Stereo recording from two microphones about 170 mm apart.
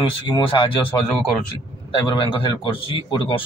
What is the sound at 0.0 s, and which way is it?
Speech, 30° left (ahead or behind).